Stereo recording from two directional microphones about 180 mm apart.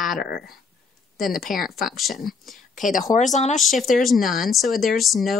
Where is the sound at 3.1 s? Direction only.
40° left (ahead or behind).